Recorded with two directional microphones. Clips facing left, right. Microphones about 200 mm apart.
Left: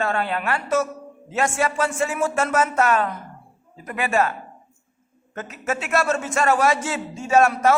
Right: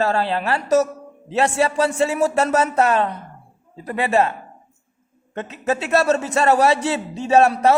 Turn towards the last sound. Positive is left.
turn(degrees=-30)  # may be behind; listen again after turning